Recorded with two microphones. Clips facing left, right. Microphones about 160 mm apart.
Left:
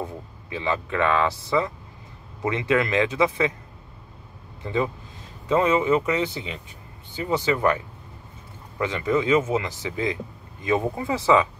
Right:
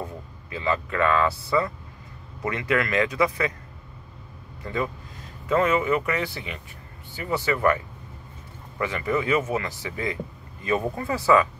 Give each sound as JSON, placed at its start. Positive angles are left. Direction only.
{"t": 0.0, "sound": "speech", "side_deg": 20}
{"t": 2.4, "sound": "speech", "side_deg": 20}
{"t": 4.6, "sound": "speech", "side_deg": 20}
{"t": 8.7, "sound": "speech", "side_deg": 20}